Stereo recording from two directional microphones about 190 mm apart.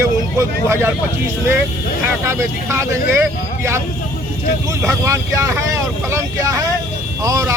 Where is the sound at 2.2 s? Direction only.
15° right (ahead or behind).